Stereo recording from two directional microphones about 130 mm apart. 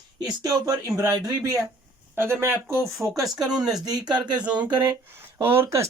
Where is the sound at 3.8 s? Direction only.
30° right (ahead or behind).